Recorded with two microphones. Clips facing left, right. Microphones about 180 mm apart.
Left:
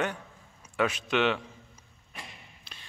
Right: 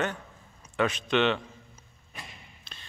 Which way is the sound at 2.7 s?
10° left (ahead or behind).